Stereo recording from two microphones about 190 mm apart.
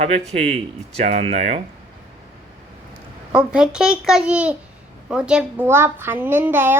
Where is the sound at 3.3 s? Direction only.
5° right (ahead or behind).